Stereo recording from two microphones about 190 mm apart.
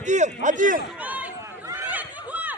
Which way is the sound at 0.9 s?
10° right (ahead or behind).